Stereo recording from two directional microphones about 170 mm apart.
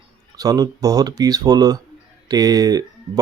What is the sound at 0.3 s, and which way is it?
Speech, 20° right (ahead or behind).